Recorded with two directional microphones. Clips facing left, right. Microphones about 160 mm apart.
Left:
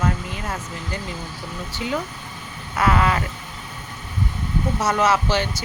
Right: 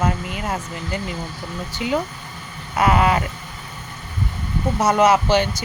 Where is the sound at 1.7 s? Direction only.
15° right (ahead or behind).